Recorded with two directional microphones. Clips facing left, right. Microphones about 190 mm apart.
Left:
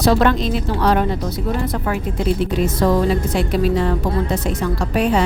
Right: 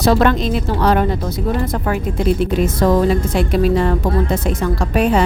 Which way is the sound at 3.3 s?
50° right (ahead or behind).